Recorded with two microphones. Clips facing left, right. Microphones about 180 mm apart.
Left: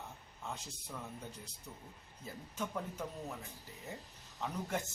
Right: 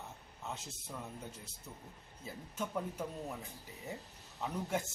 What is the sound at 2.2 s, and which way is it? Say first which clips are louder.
Speech: right 1 dB; 5° right (ahead or behind).